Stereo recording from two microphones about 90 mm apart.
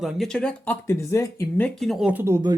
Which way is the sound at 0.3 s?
15° left (ahead or behind).